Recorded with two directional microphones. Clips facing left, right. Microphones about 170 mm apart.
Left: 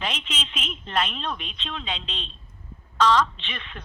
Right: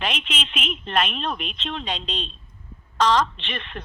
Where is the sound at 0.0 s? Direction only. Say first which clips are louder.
Right 3 dB; 60° right (ahead or behind).